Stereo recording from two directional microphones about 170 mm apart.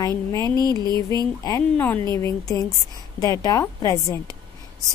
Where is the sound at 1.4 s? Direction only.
20° left (ahead or behind).